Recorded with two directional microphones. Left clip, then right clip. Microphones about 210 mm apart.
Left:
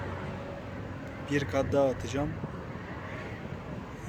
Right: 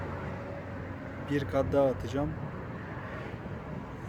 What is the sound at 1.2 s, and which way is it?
Speech, 15° right (ahead or behind).